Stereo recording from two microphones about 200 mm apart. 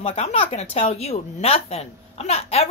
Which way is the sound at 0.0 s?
30° left (ahead or behind).